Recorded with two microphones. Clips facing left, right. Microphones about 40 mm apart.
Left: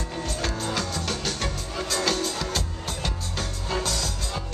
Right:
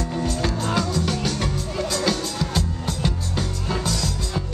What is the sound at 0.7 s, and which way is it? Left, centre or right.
Music, centre.